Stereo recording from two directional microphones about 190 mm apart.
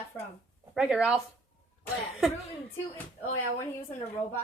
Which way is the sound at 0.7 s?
5° right (ahead or behind).